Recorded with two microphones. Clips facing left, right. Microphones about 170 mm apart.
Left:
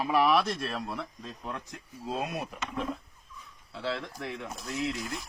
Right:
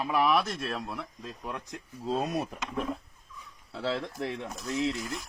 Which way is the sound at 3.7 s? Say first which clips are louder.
Right 2 dB; 40° right (ahead or behind).